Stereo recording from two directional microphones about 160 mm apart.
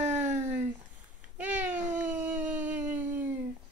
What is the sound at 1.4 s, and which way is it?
Cat, 10° right (ahead or behind).